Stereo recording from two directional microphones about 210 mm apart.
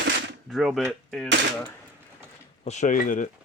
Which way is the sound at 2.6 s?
35° left (ahead or behind).